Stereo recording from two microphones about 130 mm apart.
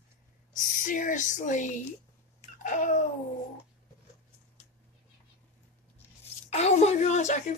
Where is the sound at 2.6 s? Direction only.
75° left (ahead or behind).